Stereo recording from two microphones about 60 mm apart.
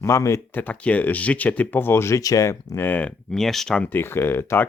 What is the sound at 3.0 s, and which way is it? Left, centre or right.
Speech, centre.